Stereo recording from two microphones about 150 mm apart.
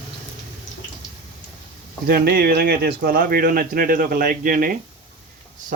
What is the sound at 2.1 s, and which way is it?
Speech, 85° right.